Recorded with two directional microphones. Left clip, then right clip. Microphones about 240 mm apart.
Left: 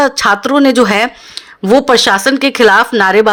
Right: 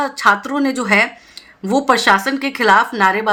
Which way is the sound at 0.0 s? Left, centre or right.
Left.